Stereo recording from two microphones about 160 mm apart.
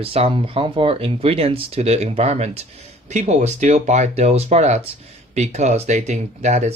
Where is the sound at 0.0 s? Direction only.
40° right (ahead or behind).